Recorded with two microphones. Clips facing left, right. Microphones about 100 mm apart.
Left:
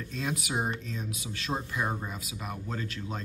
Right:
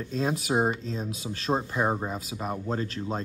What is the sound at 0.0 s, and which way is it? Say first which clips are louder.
Speech: right 6 dB; 35° right (ahead or behind).